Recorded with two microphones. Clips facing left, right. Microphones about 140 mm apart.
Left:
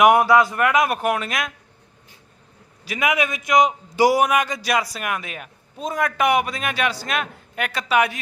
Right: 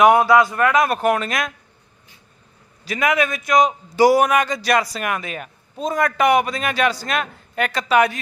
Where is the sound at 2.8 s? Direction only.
10° left (ahead or behind).